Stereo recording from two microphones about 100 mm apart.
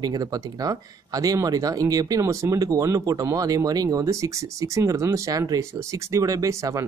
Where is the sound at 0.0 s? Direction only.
40° right (ahead or behind).